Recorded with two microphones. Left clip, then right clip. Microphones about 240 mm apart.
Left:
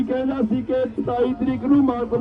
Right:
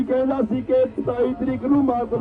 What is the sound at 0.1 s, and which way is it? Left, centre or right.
A man's voice, centre.